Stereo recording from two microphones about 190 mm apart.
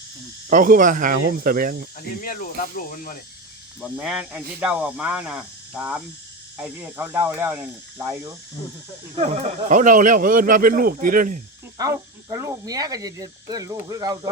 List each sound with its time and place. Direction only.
0.5 s speech: 45° right (ahead or behind)
2.0 s speech: 50° left (ahead or behind)
3.8 s speech: centre (ahead or behind)
9.1 s speech: 40° right (ahead or behind)
11.8 s speech: 20° right (ahead or behind)